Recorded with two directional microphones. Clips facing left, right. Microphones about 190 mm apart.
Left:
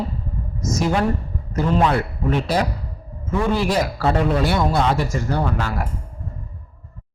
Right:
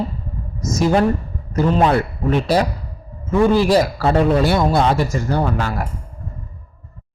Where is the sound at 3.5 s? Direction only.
35° right (ahead or behind).